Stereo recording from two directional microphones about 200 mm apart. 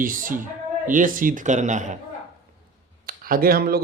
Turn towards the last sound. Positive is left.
turn(degrees=-50)  # may be behind; listen again after turning